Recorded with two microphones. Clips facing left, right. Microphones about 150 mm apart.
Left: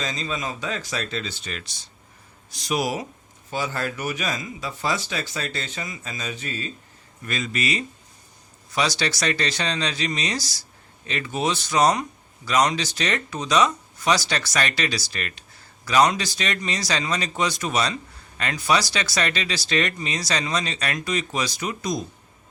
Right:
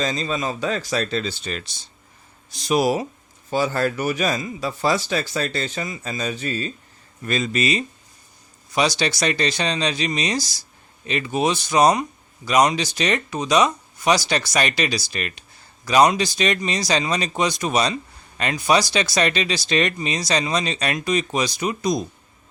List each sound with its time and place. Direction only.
0.0 s a man's voice: 35° right (ahead or behind); by 22.0 s 15° right (ahead or behind)